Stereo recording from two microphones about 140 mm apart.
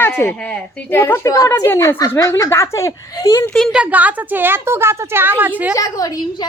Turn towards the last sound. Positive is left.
turn(degrees=30)  # may be behind; listen again after turning